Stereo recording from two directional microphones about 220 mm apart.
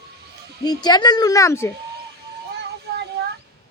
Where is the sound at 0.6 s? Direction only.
20° left (ahead or behind).